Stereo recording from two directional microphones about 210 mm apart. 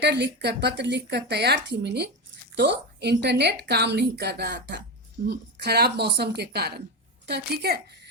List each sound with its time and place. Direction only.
0.0 s a woman's voice: 55° right (ahead or behind)